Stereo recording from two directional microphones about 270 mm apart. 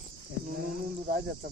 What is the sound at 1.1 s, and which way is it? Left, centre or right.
Speech, right.